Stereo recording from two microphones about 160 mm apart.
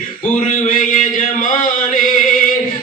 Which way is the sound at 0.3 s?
55° left (ahead or behind).